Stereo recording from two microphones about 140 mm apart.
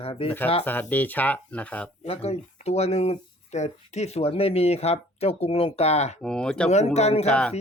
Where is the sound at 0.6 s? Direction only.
10° left (ahead or behind).